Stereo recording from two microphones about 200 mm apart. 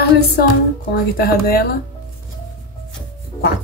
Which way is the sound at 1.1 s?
50° left (ahead or behind).